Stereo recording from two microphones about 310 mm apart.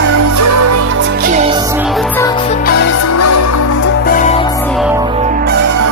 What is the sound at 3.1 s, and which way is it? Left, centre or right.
Music, left.